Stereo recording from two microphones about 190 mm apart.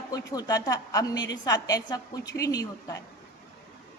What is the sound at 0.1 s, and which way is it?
A woman's voice, 20° left (ahead or behind).